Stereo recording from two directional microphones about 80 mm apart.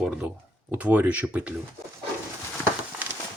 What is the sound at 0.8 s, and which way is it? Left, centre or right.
Speech, centre.